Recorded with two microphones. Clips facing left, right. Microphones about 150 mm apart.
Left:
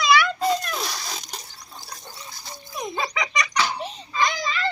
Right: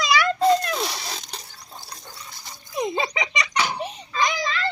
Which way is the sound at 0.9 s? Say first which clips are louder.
Right 1 dB; 25° right (ahead or behind).